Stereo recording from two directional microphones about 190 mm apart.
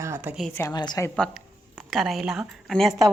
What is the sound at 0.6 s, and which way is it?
Speech, 20° left (ahead or behind).